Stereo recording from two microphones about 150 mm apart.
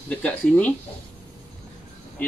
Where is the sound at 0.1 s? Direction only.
10° left (ahead or behind).